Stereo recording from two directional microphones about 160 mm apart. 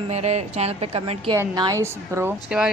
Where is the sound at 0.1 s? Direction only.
45° right (ahead or behind).